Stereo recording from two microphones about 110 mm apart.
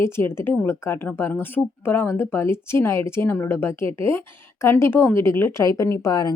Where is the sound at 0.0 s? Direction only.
25° left (ahead or behind).